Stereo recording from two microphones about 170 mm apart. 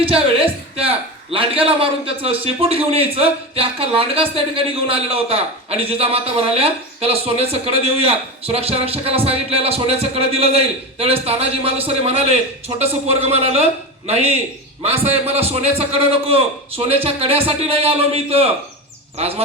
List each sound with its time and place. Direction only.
0.0 s a man's voice: 35° right (ahead or behind)
14.8 s a man's voice: 35° right (ahead or behind)